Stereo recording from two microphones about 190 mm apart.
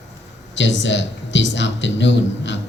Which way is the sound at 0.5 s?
70° left (ahead or behind).